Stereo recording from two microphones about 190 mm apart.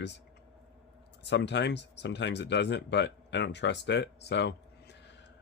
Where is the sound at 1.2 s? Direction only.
65° left (ahead or behind).